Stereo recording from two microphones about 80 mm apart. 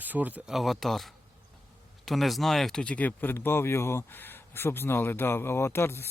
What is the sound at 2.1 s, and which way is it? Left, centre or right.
Speech, centre.